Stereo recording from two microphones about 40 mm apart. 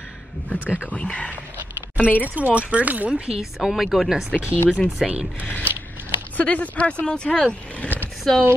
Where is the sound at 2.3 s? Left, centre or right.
Right.